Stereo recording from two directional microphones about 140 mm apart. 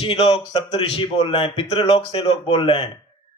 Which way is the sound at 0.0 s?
35° left (ahead or behind).